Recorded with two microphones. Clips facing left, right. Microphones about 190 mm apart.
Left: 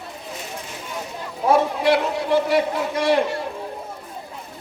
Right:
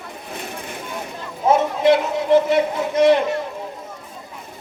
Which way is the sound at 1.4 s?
20° right (ahead or behind).